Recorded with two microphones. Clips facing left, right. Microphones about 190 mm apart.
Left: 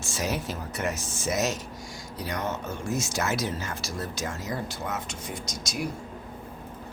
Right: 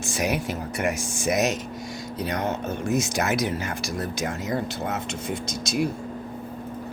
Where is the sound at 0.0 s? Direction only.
15° right (ahead or behind).